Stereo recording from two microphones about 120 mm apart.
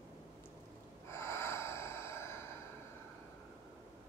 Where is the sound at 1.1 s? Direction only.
20° left (ahead or behind).